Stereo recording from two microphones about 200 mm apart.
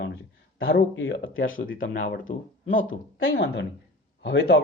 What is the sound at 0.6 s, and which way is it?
Speech, 75° left (ahead or behind).